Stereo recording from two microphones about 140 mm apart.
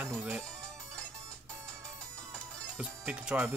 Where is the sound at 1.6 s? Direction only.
20° right (ahead or behind).